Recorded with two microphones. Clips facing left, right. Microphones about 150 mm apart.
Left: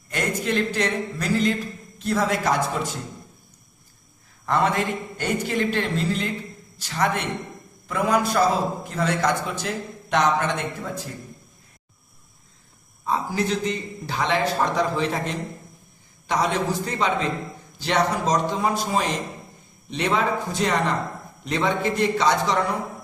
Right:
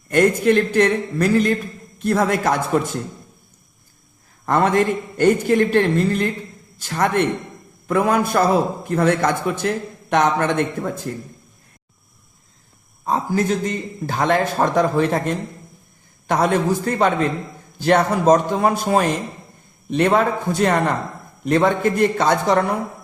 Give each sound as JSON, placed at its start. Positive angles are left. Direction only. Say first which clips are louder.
{"t": 0.1, "sound": "a man's voice", "louder": "right 10 dB", "side_deg": -55}
{"t": 4.4, "sound": "a man's voice", "louder": "right 5 dB", "side_deg": -50}
{"t": 13.1, "sound": "a man's voice", "louder": "right 4 dB", "side_deg": -45}